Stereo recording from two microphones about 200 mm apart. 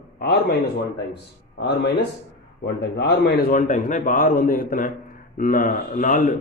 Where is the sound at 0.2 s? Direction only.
50° left (ahead or behind).